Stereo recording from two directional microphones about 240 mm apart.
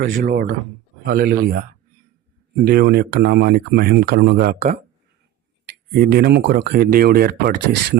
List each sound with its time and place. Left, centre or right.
0.0 s speech: right
2.6 s speech: right
5.9 s speech: right